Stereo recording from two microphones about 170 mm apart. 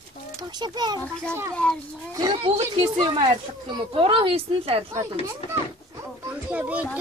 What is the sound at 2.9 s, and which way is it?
Speech, 30° right (ahead or behind).